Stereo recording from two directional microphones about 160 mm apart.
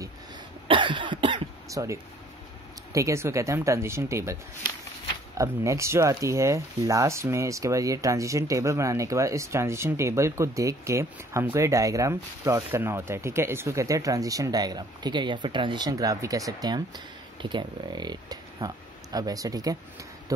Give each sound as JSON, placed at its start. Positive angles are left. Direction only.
{"t": 0.7, "sound": "cough", "side_deg": -30}
{"t": 2.9, "sound": "speech", "side_deg": -20}
{"t": 5.4, "sound": "speech", "side_deg": -20}